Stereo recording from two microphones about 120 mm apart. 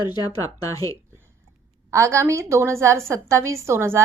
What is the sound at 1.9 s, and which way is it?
A woman's voice, 25° right (ahead or behind).